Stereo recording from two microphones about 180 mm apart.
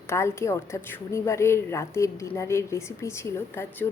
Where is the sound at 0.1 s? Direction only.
15° left (ahead or behind).